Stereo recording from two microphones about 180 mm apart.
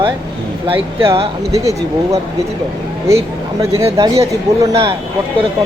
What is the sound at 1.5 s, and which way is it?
Speech, 15° right (ahead or behind).